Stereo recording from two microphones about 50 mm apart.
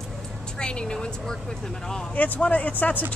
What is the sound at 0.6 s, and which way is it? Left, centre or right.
Speech, centre.